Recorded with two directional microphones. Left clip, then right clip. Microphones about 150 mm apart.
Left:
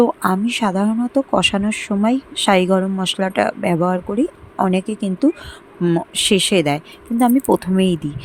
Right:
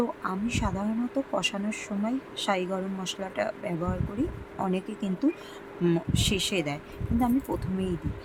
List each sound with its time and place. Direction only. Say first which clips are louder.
0.0 s speech: left 14 dB; 60° left (ahead or behind)
5.8 s speech: left 8 dB; 35° left (ahead or behind)
6.1 s speech: left 12 dB; 55° left (ahead or behind)